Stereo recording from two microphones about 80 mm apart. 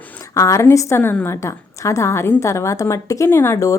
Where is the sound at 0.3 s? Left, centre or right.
Left.